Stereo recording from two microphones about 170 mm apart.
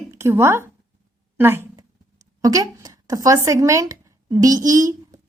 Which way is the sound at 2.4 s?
20° right (ahead or behind).